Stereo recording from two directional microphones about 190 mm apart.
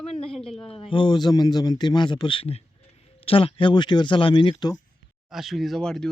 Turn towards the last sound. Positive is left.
turn(degrees=5)  # may be behind; listen again after turning